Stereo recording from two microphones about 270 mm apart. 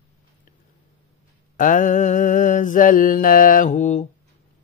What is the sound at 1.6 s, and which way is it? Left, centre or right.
Mantra, left.